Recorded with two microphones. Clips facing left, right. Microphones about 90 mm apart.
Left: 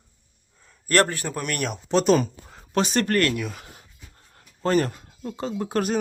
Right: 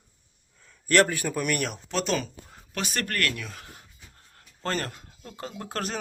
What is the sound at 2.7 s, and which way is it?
Speech, 25° left (ahead or behind).